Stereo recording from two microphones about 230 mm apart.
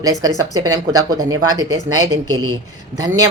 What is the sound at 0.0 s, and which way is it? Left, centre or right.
Speech, centre.